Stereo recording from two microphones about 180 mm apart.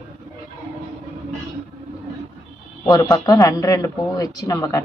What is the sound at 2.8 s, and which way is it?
A woman's voice, 20° left (ahead or behind).